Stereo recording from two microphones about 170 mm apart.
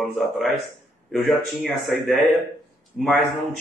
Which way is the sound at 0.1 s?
Centre (ahead or behind).